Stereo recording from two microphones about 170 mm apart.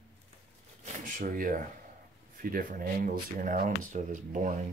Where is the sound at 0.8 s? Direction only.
55° right (ahead or behind).